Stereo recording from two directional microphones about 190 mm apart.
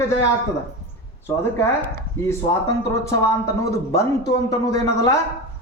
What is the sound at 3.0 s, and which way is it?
Speech, 15° left (ahead or behind).